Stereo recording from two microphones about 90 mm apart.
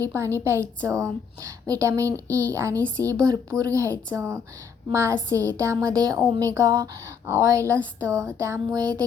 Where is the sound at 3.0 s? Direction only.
40° right (ahead or behind).